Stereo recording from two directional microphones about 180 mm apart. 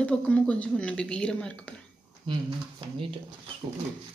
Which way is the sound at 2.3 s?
25° right (ahead or behind).